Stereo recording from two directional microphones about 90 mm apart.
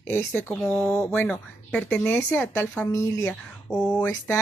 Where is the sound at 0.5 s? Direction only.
10° left (ahead or behind); by 3.3 s 30° left (ahead or behind).